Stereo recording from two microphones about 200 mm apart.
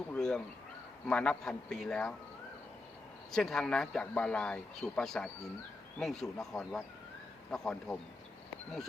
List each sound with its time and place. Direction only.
0.1 s a sound: 5° left (ahead or behind)
1.0 s speech: 5° left (ahead or behind)
3.3 s speech: centre (ahead or behind)